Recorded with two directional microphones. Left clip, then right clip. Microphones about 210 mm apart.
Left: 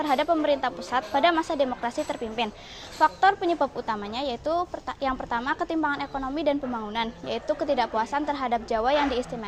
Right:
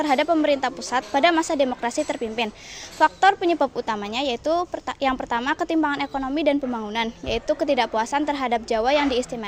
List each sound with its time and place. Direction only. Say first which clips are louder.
0.0 s speech: right 3 dB; 40° right (ahead or behind)